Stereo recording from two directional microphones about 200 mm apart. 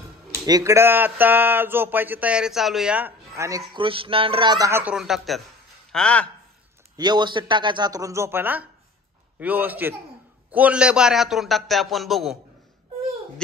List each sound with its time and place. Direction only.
0.5 s a man's voice: 15° right (ahead or behind); by 6.2 s 5° left (ahead or behind)
7.0 s a man's voice: 20° right (ahead or behind); by 12.4 s centre (ahead or behind)